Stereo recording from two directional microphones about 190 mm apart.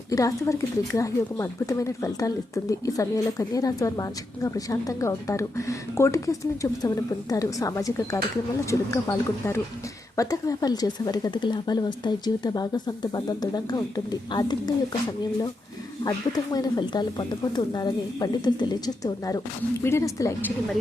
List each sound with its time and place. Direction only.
0.1 s a woman's voice: 15° left (ahead or behind)
16.0 s a woman's voice: 20° left (ahead or behind)